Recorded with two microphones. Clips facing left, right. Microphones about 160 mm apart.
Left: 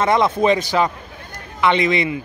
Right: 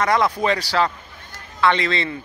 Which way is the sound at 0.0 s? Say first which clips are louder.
Left 3 dB; 25° left (ahead or behind).